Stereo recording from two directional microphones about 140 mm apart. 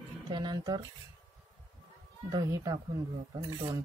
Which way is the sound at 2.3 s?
25° right (ahead or behind).